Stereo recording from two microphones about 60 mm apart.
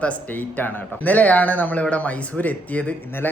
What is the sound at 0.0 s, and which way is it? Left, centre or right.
A man's voice, left.